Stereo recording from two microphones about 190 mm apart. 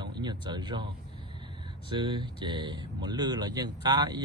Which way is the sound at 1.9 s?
25° right (ahead or behind).